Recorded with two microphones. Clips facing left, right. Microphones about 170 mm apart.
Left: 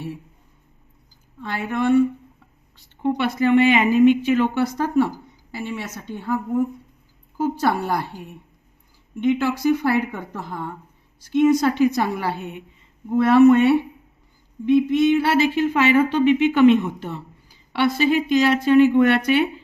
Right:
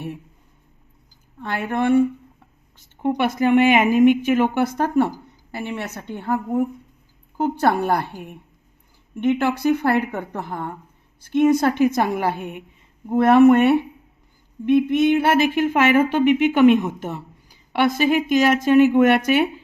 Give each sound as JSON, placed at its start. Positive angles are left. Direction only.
{"t": 1.4, "sound": "a woman's voice", "side_deg": -55}
{"t": 3.2, "sound": "a woman's voice", "side_deg": -50}
{"t": 16.5, "sound": "speech", "side_deg": -10}
{"t": 17.7, "sound": "a woman's voice", "side_deg": -45}